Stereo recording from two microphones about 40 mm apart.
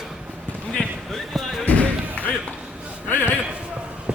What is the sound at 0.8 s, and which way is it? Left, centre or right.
Basketball bounce, left.